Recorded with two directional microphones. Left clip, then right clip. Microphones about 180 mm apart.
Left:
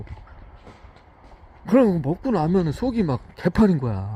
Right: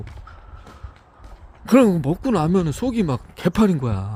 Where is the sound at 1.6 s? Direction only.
25° right (ahead or behind).